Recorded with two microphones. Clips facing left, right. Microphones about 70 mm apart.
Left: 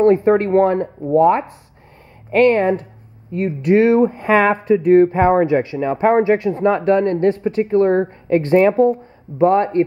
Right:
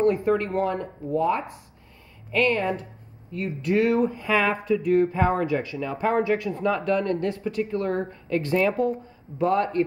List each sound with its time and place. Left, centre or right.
0.0 s speech: left